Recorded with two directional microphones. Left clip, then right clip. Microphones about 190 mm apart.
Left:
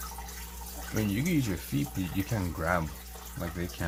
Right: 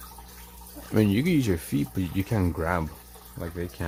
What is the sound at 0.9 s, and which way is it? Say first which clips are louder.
Speech: right 7 dB; 65° right (ahead or behind).